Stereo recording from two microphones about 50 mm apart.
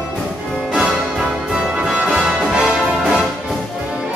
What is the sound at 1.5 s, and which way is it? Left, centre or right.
Music, centre.